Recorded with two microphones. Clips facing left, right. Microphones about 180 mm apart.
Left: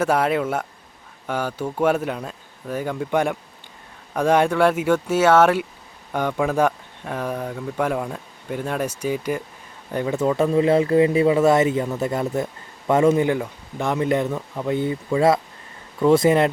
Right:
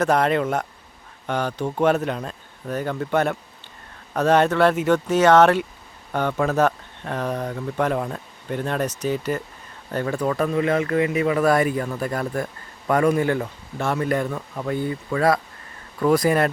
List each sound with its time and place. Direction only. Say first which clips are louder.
0.0 s speech: even; 10° left (ahead or behind)
14.8 s speech: left 3 dB; 20° left (ahead or behind)